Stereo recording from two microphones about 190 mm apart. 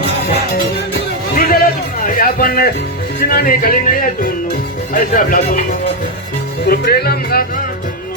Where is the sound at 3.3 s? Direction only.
50° left (ahead or behind).